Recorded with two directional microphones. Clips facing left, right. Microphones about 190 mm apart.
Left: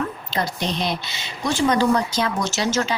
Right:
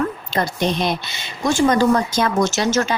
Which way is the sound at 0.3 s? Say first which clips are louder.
Right 4 dB; 50° right (ahead or behind).